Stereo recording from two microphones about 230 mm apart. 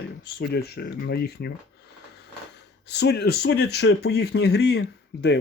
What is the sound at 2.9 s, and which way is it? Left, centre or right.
Speech, left.